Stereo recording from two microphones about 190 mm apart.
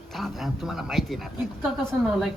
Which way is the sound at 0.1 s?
Centre (ahead or behind).